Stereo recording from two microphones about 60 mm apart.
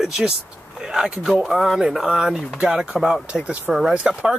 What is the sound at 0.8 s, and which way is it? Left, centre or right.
Speech, centre.